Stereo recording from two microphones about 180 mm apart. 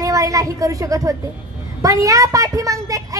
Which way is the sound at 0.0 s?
20° right (ahead or behind).